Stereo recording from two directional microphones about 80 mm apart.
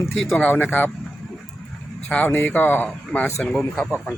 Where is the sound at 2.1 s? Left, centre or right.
Centre.